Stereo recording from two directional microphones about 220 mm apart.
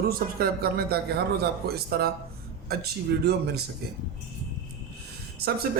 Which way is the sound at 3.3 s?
45° right (ahead or behind).